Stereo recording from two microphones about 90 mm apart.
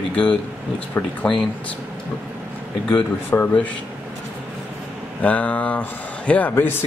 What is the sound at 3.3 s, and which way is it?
Speech, 20° left (ahead or behind).